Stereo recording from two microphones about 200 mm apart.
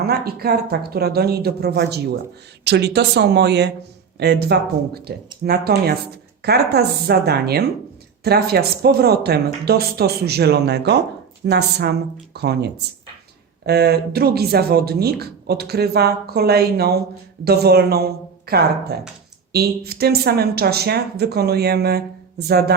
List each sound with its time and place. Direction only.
0.0 s speech: 50° right (ahead or behind)